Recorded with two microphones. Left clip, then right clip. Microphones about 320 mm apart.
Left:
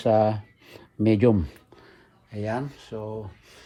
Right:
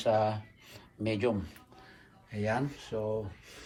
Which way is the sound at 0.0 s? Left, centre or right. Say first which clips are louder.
Left 7 dB; left.